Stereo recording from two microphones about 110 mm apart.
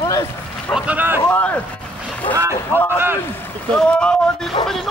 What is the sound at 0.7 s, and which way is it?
Speech, 15° right (ahead or behind).